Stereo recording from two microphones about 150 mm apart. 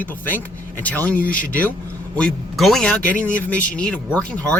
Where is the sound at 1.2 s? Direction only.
65° left (ahead or behind).